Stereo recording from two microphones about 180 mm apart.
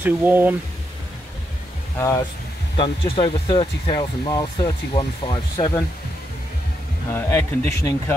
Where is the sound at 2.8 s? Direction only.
25° left (ahead or behind).